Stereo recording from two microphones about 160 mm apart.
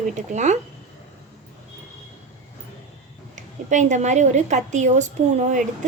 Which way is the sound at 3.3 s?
50° right (ahead or behind).